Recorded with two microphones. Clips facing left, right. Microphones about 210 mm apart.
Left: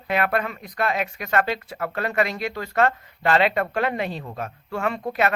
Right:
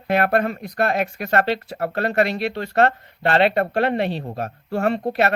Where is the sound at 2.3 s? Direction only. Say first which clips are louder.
Right 4 dB; 65° right (ahead or behind).